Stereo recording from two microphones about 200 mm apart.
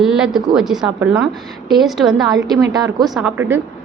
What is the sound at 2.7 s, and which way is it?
Speech, 20° right (ahead or behind).